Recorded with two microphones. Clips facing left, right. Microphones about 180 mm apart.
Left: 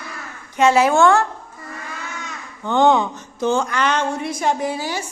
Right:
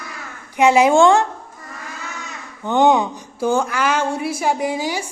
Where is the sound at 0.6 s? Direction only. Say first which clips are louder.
Right 2 dB; 15° right (ahead or behind).